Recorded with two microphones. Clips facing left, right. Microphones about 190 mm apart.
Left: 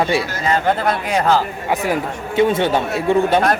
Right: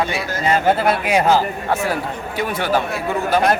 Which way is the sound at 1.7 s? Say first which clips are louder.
Left 3 dB; 15° left (ahead or behind).